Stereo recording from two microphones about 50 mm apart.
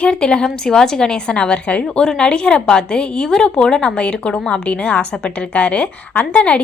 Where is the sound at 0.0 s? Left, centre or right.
Centre.